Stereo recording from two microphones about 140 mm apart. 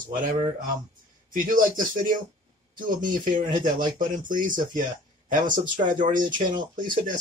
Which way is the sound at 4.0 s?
75° right (ahead or behind).